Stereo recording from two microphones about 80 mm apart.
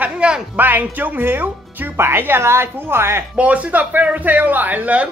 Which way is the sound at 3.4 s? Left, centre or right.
Centre.